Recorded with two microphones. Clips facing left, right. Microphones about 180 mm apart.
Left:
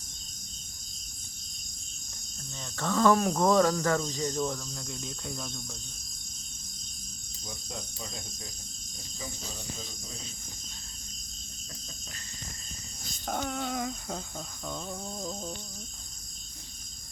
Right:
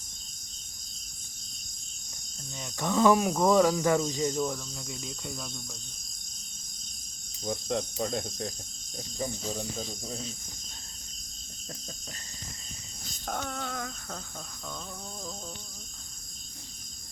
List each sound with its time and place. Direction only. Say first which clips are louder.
2.6 s speech: right 2 dB; 15° right (ahead or behind)
7.4 s speech: right 12 dB; 65° right (ahead or behind)
13.2 s humming: left 2 dB; 5° left (ahead or behind)